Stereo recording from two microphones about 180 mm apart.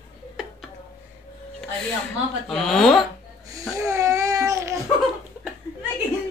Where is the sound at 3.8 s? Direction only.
15° right (ahead or behind).